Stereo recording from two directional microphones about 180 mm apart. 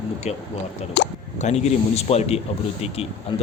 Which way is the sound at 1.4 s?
35° left (ahead or behind).